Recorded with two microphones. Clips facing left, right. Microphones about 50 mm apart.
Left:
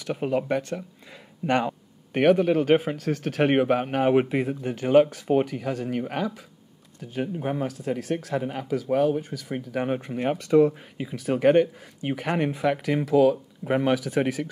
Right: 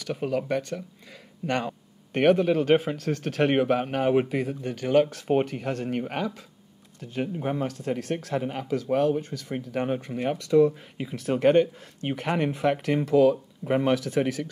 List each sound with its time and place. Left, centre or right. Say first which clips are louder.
0.0 s speech: left 2 dB; centre
2.1 s speech: left 1 dB; centre
7.5 s speech: even; centre
8.4 s speech: left 1 dB; centre
11.0 s speech: left 1 dB; centre